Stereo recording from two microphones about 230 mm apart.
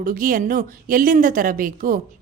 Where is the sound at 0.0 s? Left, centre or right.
Right.